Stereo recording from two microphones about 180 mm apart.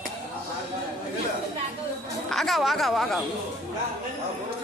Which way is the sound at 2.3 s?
Centre (ahead or behind).